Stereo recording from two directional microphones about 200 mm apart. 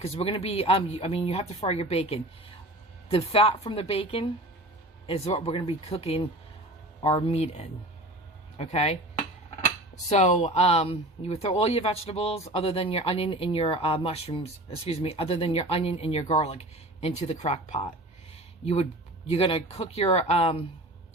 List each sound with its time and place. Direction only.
0.0 s a woman's voice: 30° left (ahead or behind)
7.3 s speech: 30° left (ahead or behind)
10.1 s speech: 35° left (ahead or behind)